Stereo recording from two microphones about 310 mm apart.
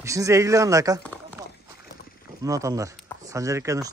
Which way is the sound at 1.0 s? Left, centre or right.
Centre.